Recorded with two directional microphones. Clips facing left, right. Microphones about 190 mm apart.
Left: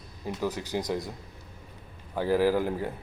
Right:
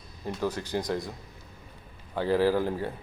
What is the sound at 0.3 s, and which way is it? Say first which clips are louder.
Speech: even; 15° left (ahead or behind).